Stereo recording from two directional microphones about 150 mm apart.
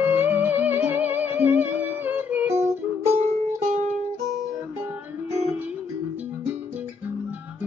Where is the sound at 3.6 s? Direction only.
50° right (ahead or behind).